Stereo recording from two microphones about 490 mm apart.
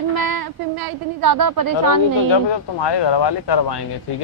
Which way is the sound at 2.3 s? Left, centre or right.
Left.